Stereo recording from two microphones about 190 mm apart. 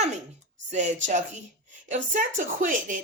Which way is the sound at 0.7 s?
40° right (ahead or behind).